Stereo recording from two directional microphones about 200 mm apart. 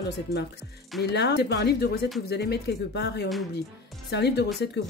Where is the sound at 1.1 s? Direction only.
55° left (ahead or behind).